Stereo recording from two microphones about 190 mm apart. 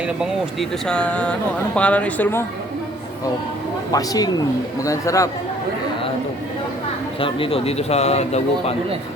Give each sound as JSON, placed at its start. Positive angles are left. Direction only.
{"t": 0.2, "sound": "speech", "side_deg": 5}
{"t": 3.9, "sound": "a woman's voice", "side_deg": 20}
{"t": 7.2, "sound": "speech", "side_deg": 30}